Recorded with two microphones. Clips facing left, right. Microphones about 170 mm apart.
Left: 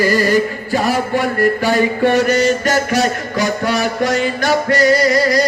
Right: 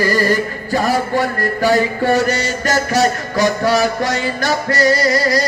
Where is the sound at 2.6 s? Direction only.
40° right (ahead or behind).